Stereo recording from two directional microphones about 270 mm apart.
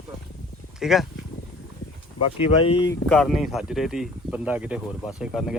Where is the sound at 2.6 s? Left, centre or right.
Centre.